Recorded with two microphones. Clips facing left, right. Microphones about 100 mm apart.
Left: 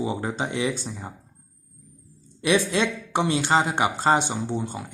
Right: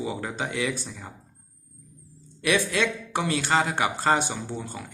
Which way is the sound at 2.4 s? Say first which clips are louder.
Left 2 dB; 25° left (ahead or behind).